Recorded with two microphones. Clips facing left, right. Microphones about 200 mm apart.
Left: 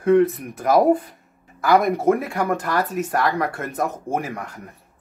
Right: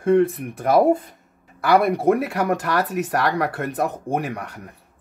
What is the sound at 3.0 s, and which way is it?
Speech, 70° right (ahead or behind).